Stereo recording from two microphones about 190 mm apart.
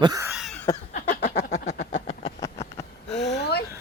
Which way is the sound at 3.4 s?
60° left (ahead or behind).